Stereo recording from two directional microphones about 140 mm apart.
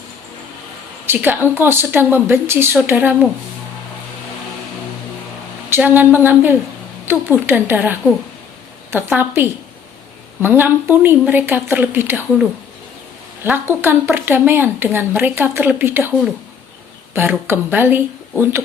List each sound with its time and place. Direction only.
1.0 s speech: 15° right (ahead or behind)
5.7 s speech: 15° right (ahead or behind)
13.4 s speech: 15° right (ahead or behind)
17.2 s speech: 15° right (ahead or behind)